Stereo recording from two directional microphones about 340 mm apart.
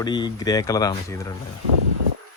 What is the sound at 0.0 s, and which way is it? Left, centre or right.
Speech, centre.